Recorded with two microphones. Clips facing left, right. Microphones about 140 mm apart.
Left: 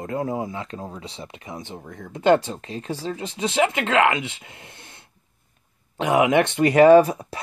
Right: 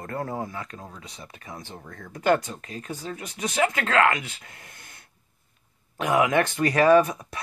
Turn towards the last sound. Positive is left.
turn(degrees=30)  # may be behind; listen again after turning